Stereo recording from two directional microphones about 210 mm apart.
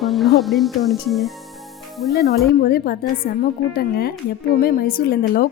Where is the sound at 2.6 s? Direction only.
45° left (ahead or behind).